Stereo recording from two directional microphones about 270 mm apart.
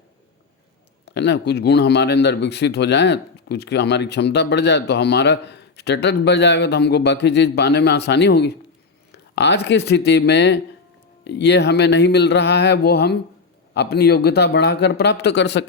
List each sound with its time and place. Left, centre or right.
1.0 s speech: left